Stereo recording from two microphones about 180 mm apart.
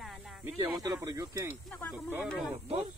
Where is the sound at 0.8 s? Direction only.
20° right (ahead or behind).